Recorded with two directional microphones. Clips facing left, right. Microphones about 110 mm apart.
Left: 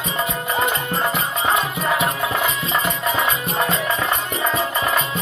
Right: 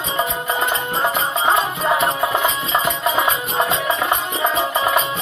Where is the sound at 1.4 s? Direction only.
15° right (ahead or behind).